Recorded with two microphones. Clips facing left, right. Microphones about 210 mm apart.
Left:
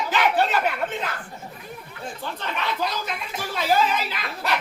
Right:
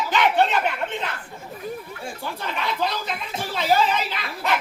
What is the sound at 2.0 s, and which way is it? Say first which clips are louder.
Speech: even; 10° right (ahead or behind).